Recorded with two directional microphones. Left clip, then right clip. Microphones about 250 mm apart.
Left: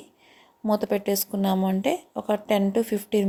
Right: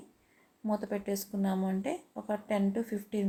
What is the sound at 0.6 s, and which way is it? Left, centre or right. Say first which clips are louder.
Speech: left 10 dB; left.